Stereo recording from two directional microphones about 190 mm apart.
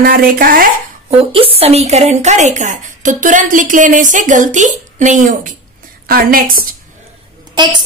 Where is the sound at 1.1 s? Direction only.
30° right (ahead or behind); by 6.5 s 50° right (ahead or behind).